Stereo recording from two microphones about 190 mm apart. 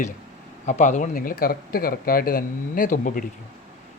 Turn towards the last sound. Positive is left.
turn(degrees=45)  # may be behind; listen again after turning